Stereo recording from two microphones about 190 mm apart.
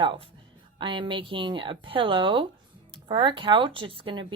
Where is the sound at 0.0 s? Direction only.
25° right (ahead or behind).